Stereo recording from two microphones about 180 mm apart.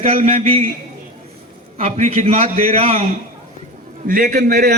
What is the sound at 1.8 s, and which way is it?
A man's voice, 35° right (ahead or behind).